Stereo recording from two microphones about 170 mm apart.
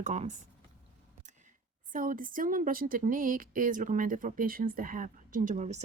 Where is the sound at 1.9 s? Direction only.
55° right (ahead or behind).